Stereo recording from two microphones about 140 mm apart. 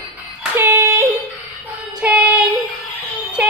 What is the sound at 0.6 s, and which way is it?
Yodeling, 15° right (ahead or behind).